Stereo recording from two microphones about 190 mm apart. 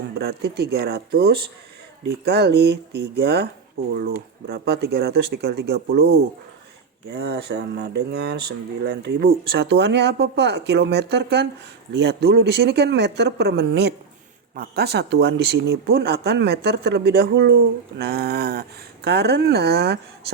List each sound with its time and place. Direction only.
0.3 s speech: 60° right (ahead or behind)
7.1 s speech: 60° right (ahead or behind)